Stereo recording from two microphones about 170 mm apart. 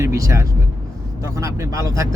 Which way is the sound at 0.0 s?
15° right (ahead or behind).